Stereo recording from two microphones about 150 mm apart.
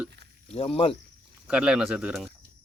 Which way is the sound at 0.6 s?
40° left (ahead or behind).